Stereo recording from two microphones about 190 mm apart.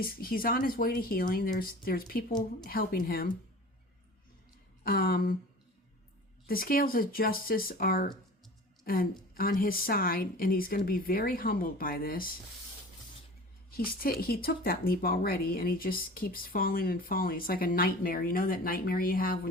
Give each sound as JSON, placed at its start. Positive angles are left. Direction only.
{"t": 0.0, "sound": "speech", "side_deg": 50}
{"t": 4.8, "sound": "speech", "side_deg": 50}
{"t": 6.5, "sound": "speech", "side_deg": 50}
{"t": 13.7, "sound": "speech", "side_deg": 50}